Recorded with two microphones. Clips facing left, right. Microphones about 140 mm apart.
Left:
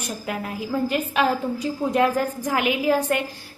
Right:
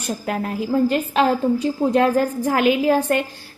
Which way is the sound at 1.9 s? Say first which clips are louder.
Right 2 dB; 35° right (ahead or behind).